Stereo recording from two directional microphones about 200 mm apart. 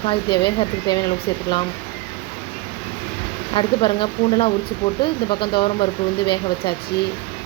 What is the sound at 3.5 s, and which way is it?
A woman's voice, 25° left (ahead or behind).